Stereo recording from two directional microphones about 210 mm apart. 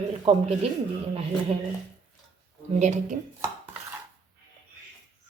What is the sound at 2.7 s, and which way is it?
Speech, 35° right (ahead or behind).